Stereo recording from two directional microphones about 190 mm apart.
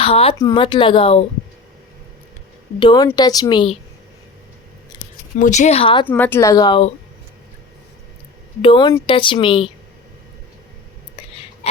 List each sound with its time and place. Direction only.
0.0 s speech: 30° left (ahead or behind)
2.7 s speech: 20° left (ahead or behind)
4.9 s scissors: 20° left (ahead or behind)
5.4 s speech: 40° left (ahead or behind)
6.1 s speech: 10° left (ahead or behind); by 6.9 s 25° left (ahead or behind)
8.6 s speech: 25° left (ahead or behind)
11.2 s whispering: 30° left (ahead or behind)
11.6 s a sound: 30° left (ahead or behind)